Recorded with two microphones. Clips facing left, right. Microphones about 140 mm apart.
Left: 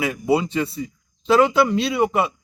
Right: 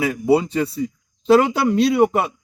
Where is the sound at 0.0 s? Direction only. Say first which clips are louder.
Right 3 dB; 40° right (ahead or behind).